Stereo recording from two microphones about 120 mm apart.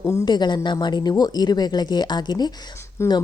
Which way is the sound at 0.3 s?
35° left (ahead or behind).